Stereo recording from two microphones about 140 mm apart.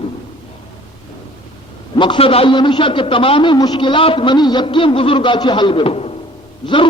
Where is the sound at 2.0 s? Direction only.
40° left (ahead or behind).